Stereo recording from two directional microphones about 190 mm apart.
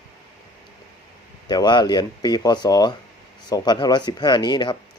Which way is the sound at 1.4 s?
20° left (ahead or behind).